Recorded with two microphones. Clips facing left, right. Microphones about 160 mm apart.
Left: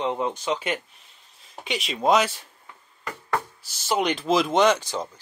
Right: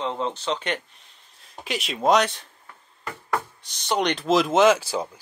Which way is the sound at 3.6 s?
5° left (ahead or behind).